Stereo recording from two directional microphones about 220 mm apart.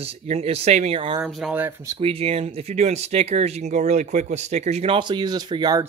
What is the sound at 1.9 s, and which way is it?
Speech, 25° right (ahead or behind).